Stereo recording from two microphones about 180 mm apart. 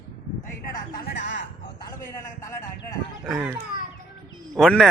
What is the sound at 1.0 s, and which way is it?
Music, 85° left.